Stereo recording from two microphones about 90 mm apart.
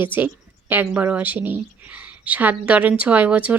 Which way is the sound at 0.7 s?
20° right (ahead or behind).